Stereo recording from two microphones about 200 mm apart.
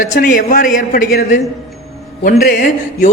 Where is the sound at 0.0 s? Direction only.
40° left (ahead or behind).